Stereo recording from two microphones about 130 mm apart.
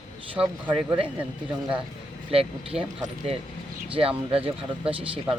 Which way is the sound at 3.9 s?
45° right (ahead or behind).